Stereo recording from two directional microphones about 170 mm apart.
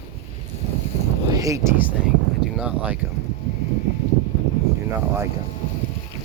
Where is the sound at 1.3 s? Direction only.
20° right (ahead or behind).